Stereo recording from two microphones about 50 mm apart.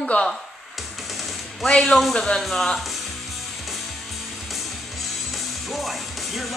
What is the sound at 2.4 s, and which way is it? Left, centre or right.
Speech, centre.